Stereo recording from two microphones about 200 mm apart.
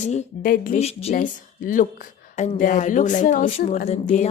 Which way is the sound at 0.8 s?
30° left (ahead or behind).